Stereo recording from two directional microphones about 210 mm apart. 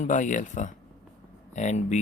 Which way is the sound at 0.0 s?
35° left (ahead or behind).